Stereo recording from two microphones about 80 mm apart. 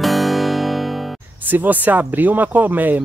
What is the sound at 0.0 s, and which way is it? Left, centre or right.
Music, centre.